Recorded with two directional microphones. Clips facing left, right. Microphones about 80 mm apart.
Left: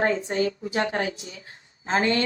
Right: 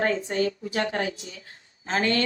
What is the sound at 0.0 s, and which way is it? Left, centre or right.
Speech, left.